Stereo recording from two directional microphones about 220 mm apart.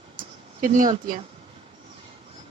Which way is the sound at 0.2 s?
35° right (ahead or behind).